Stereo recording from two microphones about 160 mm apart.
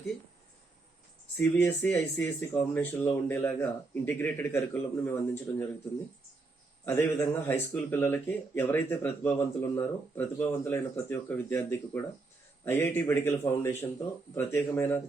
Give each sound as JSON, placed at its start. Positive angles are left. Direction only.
{"t": 1.4, "sound": "speech", "side_deg": 10}
{"t": 6.8, "sound": "speech", "side_deg": 15}